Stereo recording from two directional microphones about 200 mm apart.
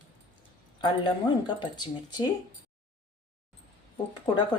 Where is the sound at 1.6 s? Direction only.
20° left (ahead or behind).